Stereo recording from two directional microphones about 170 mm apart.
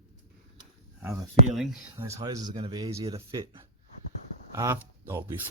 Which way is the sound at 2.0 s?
15° right (ahead or behind).